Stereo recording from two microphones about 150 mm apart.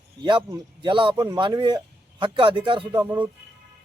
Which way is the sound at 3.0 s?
10° right (ahead or behind).